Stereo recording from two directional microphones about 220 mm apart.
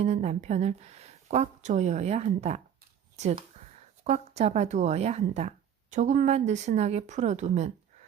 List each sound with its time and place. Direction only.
0.0 s speech: 30° right (ahead or behind)